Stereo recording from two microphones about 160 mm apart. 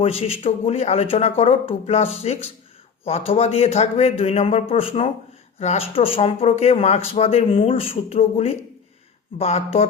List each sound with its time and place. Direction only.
0.0 s speech: 35° left (ahead or behind)